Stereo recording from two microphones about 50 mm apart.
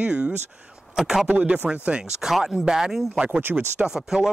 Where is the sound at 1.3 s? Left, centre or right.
Right.